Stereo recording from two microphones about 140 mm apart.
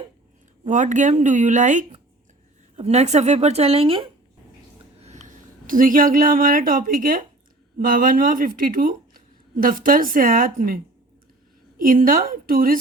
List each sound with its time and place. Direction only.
0.7 s speech: 65° right (ahead or behind)
2.7 s a woman's voice: 50° right (ahead or behind)
4.9 s a woman's voice: 55° right (ahead or behind); by 10.8 s 90° right
11.8 s a woman's voice: 85° right